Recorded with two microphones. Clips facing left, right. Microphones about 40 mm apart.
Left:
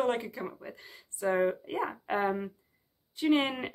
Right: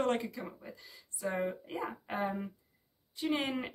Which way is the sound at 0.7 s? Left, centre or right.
Left.